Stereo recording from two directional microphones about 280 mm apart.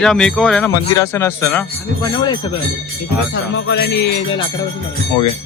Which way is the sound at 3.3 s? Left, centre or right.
Left.